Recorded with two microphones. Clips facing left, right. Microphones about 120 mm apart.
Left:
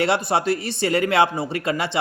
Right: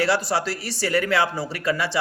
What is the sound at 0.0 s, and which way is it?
Speech, 25° left (ahead or behind).